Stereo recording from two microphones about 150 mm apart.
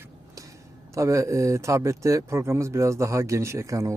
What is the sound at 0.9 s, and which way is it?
Speech, 20° right (ahead or behind).